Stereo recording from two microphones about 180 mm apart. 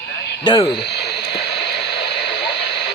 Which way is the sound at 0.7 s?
65° left (ahead or behind).